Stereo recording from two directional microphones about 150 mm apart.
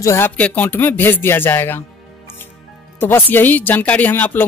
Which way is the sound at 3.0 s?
15° left (ahead or behind).